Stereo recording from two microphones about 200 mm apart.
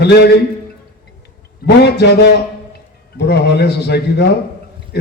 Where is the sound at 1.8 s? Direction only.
55° left (ahead or behind).